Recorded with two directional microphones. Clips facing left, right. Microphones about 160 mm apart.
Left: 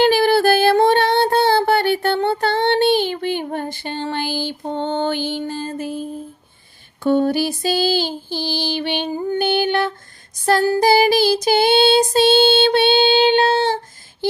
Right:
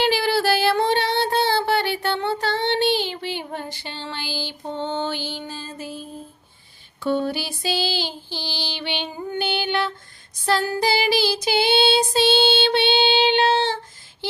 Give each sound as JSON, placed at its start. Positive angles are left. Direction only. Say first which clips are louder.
{"t": 0.0, "sound": "child singing", "louder": "left 6 dB", "side_deg": 50}
{"t": 10.4, "sound": "female singing", "louder": "left 6 dB", "side_deg": 40}